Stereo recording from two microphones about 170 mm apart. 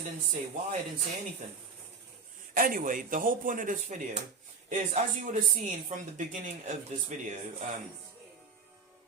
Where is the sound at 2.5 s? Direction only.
55° right (ahead or behind).